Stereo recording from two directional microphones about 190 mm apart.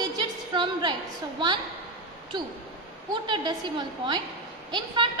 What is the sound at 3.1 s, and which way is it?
A woman's voice, 25° right (ahead or behind).